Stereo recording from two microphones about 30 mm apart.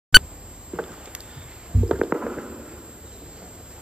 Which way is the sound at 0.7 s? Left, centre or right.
Right.